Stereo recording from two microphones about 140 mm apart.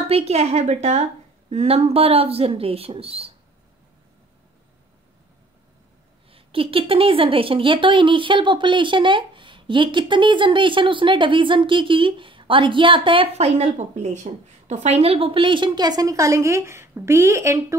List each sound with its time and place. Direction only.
0.1 s speech: 50° right (ahead or behind)
6.3 s speech: 40° right (ahead or behind); by 17.7 s 20° right (ahead or behind)